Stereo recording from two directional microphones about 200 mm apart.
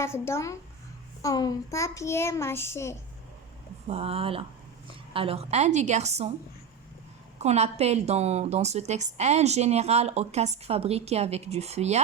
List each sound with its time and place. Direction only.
0.0 s a child's voice: 15° left (ahead or behind)
3.8 s a woman's voice: 30° right (ahead or behind)
7.3 s a woman's voice: 30° right (ahead or behind)